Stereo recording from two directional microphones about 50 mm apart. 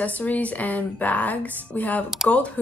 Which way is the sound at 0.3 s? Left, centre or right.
Left.